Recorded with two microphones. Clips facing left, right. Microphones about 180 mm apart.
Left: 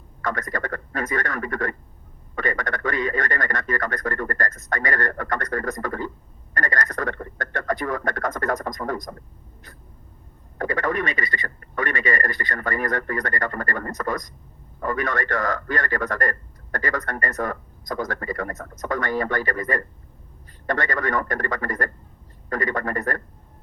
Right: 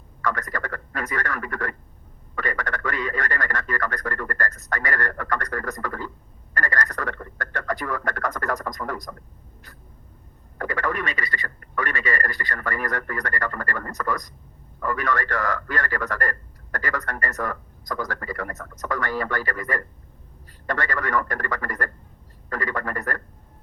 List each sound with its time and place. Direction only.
0.2 s a man's voice: 20° left (ahead or behind)
10.6 s a man's voice: 25° left (ahead or behind)